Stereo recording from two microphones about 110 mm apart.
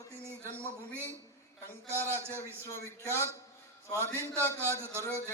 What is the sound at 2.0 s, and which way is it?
A man's voice, 20° left (ahead or behind).